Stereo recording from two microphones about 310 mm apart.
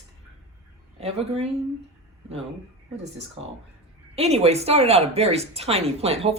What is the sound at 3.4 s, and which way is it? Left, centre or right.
Speech, centre.